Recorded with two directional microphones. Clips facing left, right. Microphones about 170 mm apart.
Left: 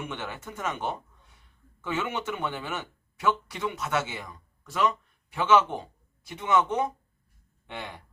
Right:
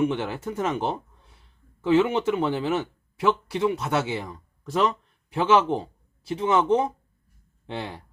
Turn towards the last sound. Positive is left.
turn(degrees=-35)  # may be behind; listen again after turning